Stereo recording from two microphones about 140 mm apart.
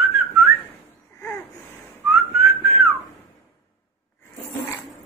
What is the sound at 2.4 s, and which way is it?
Whistling, 5° right (ahead or behind).